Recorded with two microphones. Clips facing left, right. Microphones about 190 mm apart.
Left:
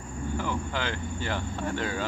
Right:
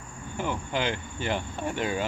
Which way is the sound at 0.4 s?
20° right (ahead or behind).